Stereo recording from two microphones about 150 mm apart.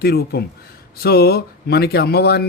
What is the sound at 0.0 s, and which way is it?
Speech, 90° left.